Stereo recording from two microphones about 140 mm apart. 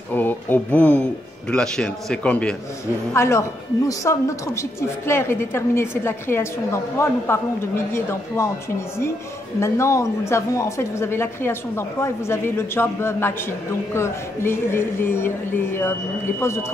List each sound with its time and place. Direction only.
0.1 s speech: 15° left (ahead or behind)
3.1 s a woman's voice: 20° left (ahead or behind)
9.6 s a woman's voice: 20° left (ahead or behind)